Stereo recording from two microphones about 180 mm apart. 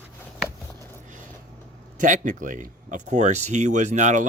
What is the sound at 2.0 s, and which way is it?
Speech, 45° right (ahead or behind).